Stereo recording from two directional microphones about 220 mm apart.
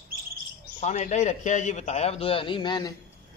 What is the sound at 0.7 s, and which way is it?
A man's voice, 30° left (ahead or behind).